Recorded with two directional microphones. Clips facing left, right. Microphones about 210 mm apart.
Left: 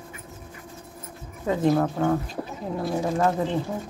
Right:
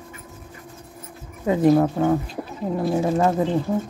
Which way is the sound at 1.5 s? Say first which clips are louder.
Right 5 dB; 10° right (ahead or behind).